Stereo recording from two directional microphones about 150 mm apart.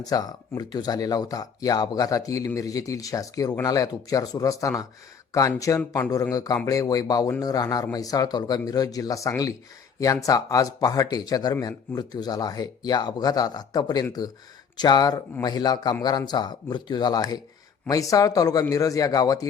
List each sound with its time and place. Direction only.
0.0 s speech: 25° left (ahead or behind)